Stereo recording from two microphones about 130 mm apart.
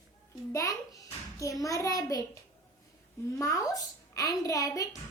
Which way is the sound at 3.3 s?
25° left (ahead or behind).